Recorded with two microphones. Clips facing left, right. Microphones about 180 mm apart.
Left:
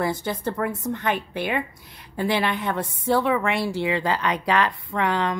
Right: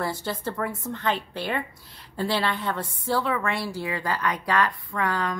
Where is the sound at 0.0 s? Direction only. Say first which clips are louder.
Left 4 dB; 15° left (ahead or behind).